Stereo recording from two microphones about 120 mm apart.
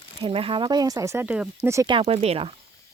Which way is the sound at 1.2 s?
10° right (ahead or behind).